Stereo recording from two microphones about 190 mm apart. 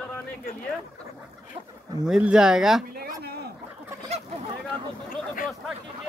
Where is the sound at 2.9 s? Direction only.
55° right (ahead or behind).